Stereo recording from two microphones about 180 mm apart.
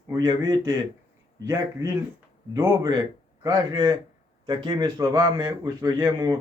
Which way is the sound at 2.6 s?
25° right (ahead or behind).